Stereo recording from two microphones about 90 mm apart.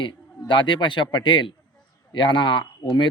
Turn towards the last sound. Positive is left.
turn(degrees=60)  # may be behind; listen again after turning